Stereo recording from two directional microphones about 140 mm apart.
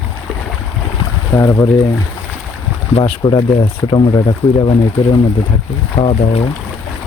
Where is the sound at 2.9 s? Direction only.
35° left (ahead or behind).